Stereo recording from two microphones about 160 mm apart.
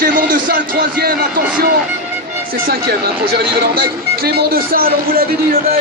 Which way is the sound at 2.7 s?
75° right (ahead or behind).